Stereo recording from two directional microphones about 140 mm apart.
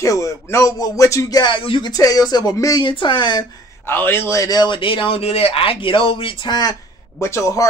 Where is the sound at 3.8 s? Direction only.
15° left (ahead or behind); by 6.7 s 30° left (ahead or behind).